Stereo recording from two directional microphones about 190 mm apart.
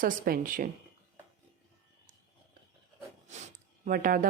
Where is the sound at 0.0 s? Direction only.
45° right (ahead or behind).